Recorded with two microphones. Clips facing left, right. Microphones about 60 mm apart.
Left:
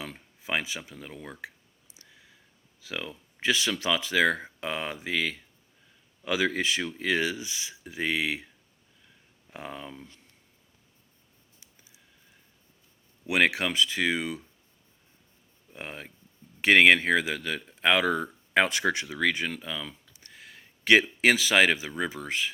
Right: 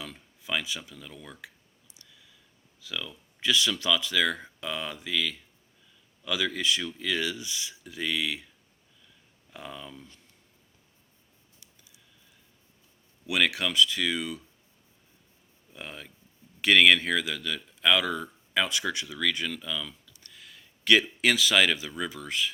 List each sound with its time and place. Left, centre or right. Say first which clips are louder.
0.0 s speech: left 2 dB; left
2.0 s clicking: left 2 dB; left
2.8 s speech: left 1 dB; left
9.5 s speech: left 2 dB; left
13.2 s speech: left 3 dB; left
15.7 s speech: left 2 dB; left